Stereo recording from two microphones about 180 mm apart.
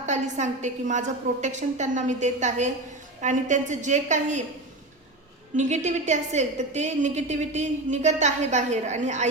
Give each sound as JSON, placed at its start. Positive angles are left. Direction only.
{"t": 0.0, "sound": "a woman's voice", "side_deg": -40}
{"t": 5.5, "sound": "a woman's voice", "side_deg": -40}